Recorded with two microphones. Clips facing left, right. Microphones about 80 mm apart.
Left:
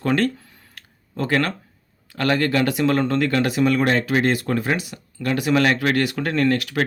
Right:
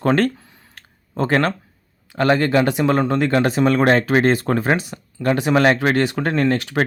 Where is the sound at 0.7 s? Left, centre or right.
Right.